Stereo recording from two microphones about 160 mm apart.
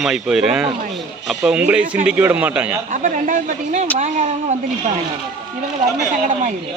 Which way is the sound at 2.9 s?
55° right (ahead or behind).